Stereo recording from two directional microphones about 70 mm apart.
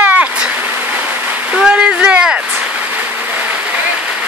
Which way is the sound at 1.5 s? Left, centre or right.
Centre.